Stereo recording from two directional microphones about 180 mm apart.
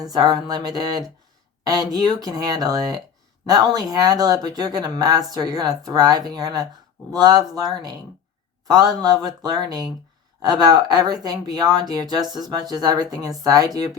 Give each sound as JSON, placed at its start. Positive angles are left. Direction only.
{"t": 0.0, "sound": "speech", "side_deg": -20}